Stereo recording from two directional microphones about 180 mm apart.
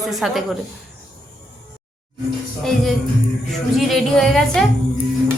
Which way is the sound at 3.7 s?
Centre (ahead or behind).